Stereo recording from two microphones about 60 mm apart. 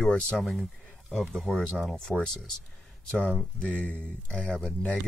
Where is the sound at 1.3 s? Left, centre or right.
Centre.